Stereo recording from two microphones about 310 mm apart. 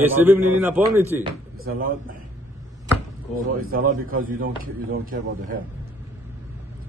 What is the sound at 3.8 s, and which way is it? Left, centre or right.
Speech, right.